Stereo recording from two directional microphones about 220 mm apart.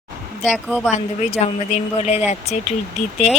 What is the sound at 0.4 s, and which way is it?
Speech, 5° right (ahead or behind).